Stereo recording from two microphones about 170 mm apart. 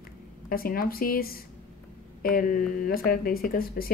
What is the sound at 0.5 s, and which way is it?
Speech, 60° left (ahead or behind).